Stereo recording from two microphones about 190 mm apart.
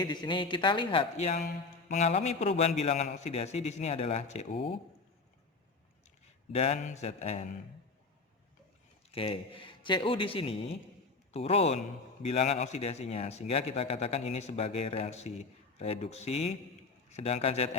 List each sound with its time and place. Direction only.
0.0 s a man's voice: 20° left (ahead or behind)
6.5 s a man's voice: 35° left (ahead or behind)
9.1 s a man's voice: 30° left (ahead or behind)